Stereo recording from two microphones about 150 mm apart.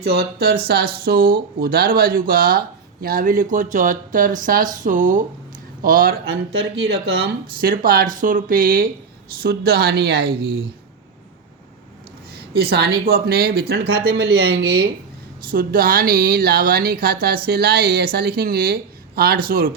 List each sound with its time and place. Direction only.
0.0 s speech: 90° right; by 5.2 s 60° right (ahead or behind)
5.8 s speech: 70° right (ahead or behind); by 7.3 s 90° right
7.6 s speech: 75° right (ahead or behind)
9.4 s speech: 90° right
12.7 s speech: 90° right
15.4 s speech: 70° right (ahead or behind)